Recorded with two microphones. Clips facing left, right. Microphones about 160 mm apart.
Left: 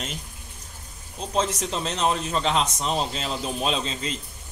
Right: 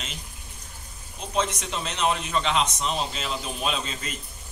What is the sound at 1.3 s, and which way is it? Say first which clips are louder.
A man's voice: left 2 dB; 35° left (ahead or behind).